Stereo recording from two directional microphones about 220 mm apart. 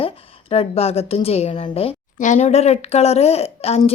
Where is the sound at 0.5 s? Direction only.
25° left (ahead or behind).